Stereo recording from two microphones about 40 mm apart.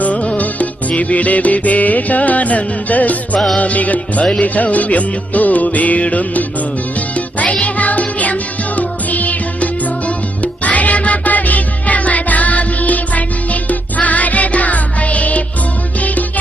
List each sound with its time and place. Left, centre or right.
0.0 s music: left
7.6 s music: left